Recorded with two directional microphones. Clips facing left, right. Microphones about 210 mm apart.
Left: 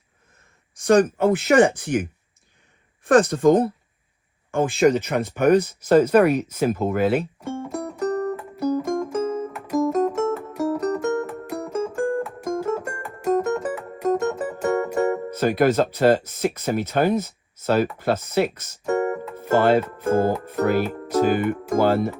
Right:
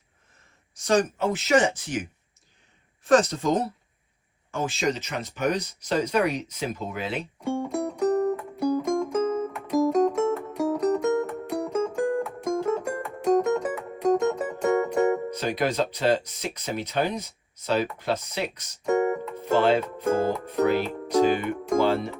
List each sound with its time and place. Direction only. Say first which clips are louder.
0.8 s speech: left 6 dB; 55° left (ahead or behind)
7.3 s music: right 2 dB; centre (ahead or behind)
15.4 s speech: left 7 dB; 50° left (ahead or behind)
18.9 s music: even; centre (ahead or behind)
19.5 s speech: left 3 dB; 50° left (ahead or behind)
19.8 s speech: left 3 dB; 5° left (ahead or behind)